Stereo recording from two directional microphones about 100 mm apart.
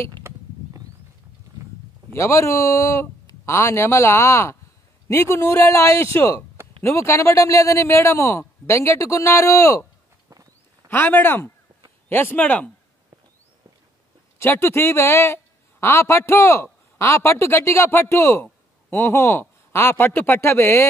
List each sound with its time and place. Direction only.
2.1 s a man's voice: 30° left (ahead or behind)
10.3 s walk: 35° right (ahead or behind)
10.9 s a man's voice: 20° left (ahead or behind)
14.4 s a man's voice: 25° left (ahead or behind)